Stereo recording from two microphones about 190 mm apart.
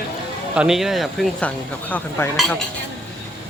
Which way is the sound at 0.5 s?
5° right (ahead or behind).